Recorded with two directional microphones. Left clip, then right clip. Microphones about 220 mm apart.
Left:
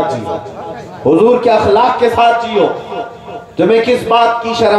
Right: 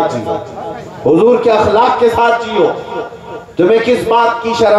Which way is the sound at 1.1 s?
30° left (ahead or behind).